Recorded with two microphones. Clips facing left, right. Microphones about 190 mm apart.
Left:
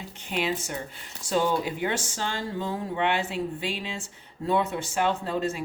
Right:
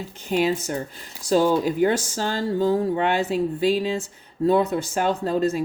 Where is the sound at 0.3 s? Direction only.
40° right (ahead or behind).